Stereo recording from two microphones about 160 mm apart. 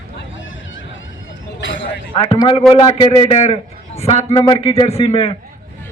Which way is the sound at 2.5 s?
35° left (ahead or behind).